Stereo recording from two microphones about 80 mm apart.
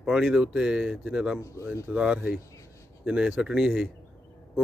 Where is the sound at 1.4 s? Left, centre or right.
Left.